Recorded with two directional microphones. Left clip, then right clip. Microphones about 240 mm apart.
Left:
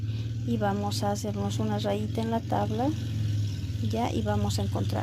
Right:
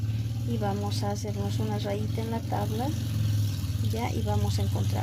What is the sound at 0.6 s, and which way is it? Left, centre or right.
Speech, left.